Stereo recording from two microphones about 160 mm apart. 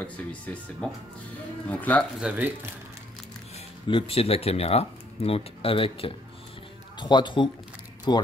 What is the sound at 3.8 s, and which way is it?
Speech, 35° left (ahead or behind).